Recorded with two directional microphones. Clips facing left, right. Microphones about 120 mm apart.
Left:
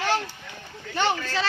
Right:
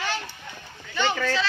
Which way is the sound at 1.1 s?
75° right (ahead or behind).